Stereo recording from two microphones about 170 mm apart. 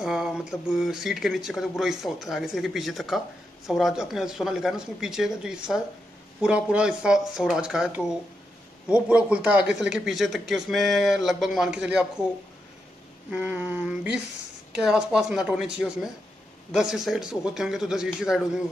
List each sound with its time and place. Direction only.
0.0 s a man's voice: centre (ahead or behind)
13.3 s a sound: 10° right (ahead or behind)
14.8 s a man's voice: 5° right (ahead or behind)